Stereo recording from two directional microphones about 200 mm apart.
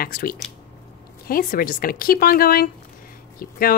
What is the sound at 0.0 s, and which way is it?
A woman's voice, 45° left (ahead or behind).